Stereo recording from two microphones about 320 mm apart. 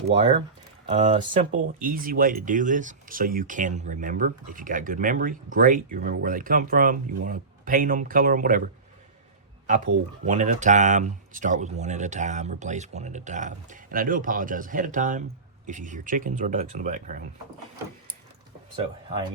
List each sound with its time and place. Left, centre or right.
0.1 s speech: centre
1.8 s speech: right